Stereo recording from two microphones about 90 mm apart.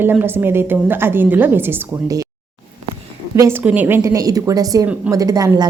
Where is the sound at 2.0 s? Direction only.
40° right (ahead or behind).